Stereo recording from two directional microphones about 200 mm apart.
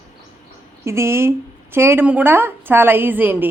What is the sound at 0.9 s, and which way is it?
A woman's voice, 15° right (ahead or behind).